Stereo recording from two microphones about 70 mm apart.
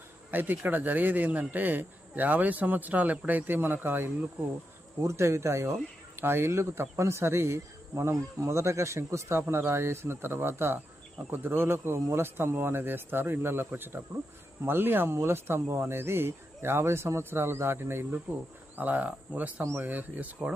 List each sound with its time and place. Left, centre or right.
0.3 s speech: right
5.0 s speech: right